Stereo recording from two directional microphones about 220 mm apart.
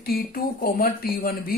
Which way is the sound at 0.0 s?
45° left (ahead or behind).